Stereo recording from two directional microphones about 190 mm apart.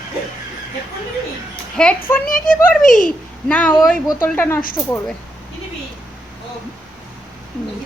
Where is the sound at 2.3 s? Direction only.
45° left (ahead or behind).